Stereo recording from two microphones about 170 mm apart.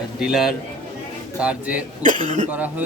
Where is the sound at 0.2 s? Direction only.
Centre (ahead or behind).